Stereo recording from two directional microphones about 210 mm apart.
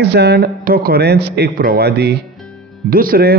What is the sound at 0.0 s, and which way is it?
Speech, 55° right (ahead or behind).